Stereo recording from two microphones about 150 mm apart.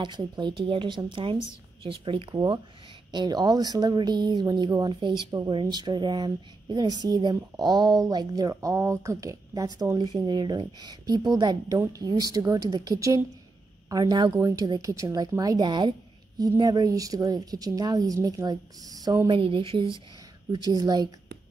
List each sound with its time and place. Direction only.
0.0 s a woman's voice: 30° right (ahead or behind)
19.3 s speech: 35° right (ahead or behind)
20.5 s speech: 25° right (ahead or behind)